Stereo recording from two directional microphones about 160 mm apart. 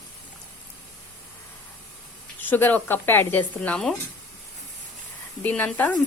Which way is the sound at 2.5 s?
10° left (ahead or behind).